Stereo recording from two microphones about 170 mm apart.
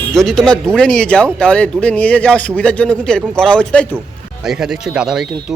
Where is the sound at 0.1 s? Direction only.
Centre (ahead or behind).